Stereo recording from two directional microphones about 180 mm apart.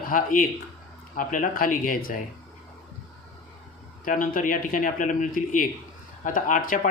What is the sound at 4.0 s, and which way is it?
Speech, 50° left (ahead or behind).